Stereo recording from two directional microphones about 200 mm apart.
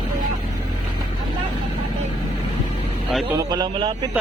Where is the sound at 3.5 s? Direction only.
25° right (ahead or behind).